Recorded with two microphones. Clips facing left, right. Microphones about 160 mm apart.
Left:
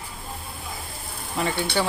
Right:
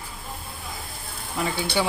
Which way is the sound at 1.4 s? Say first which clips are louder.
Left 1 dB; 5° right (ahead or behind).